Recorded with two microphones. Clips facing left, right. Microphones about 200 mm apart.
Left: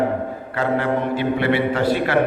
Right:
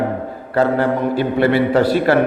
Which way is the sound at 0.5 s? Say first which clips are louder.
Right 5 dB; 40° right (ahead or behind).